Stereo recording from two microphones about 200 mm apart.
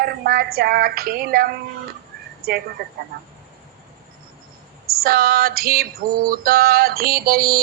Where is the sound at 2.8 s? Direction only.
50° right (ahead or behind).